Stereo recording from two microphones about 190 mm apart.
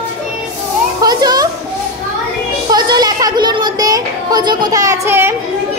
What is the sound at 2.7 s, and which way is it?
Speech, 20° right (ahead or behind).